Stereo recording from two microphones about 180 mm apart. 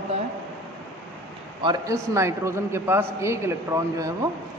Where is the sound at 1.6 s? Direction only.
20° right (ahead or behind).